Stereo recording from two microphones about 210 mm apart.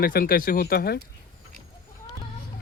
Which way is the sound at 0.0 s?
45° left (ahead or behind).